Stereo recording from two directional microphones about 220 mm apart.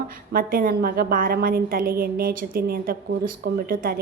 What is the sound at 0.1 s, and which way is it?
A woman's voice, 40° right (ahead or behind).